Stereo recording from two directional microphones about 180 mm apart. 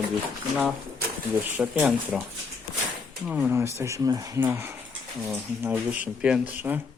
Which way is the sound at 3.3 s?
10° right (ahead or behind).